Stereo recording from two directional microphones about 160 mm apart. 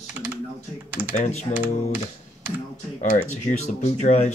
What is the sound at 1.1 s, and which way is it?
Speech, 45° left (ahead or behind).